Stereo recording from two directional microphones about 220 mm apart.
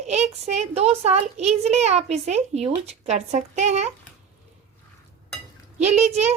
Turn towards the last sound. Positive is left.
turn(degrees=-30)  # may be behind; listen again after turning